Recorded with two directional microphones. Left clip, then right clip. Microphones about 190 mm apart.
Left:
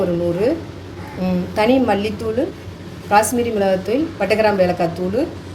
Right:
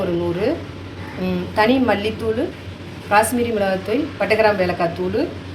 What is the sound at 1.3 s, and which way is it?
A woman's voice, 40° left (ahead or behind).